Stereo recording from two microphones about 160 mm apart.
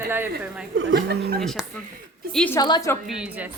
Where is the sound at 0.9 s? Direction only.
90° right.